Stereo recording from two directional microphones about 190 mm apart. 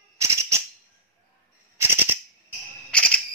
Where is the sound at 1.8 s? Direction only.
10° right (ahead or behind).